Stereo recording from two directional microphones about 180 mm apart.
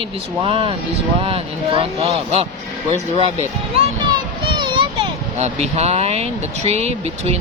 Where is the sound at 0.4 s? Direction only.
30° right (ahead or behind).